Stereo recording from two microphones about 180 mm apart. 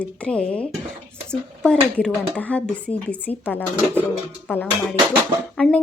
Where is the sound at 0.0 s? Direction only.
5° left (ahead or behind).